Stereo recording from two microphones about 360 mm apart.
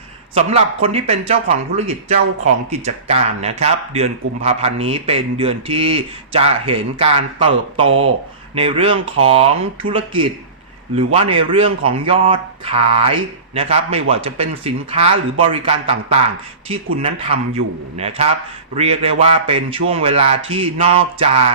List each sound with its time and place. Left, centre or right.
0.3 s speech: centre